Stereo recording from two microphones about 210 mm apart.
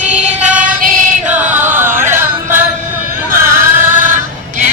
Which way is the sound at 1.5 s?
10° right (ahead or behind).